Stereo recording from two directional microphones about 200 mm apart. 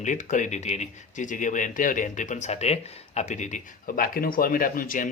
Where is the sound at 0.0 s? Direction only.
40° left (ahead or behind).